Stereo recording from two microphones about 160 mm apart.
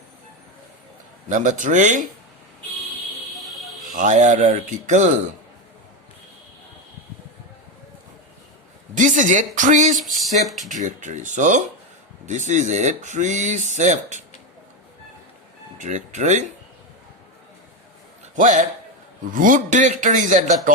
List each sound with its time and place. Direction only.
1.3 s speech: 50° right (ahead or behind)
3.3 s hiss: centre (ahead or behind)
3.9 s speech: 50° right (ahead or behind)
9.0 s speech: 50° right (ahead or behind)
10.0 s speech: centre (ahead or behind)
10.7 s speech: 50° right (ahead or behind)
15.8 s speech: 50° right (ahead or behind)
18.3 s speech: 50° right (ahead or behind)